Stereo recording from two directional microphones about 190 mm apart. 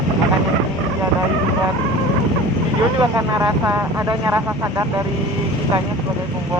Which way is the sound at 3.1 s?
15° right (ahead or behind).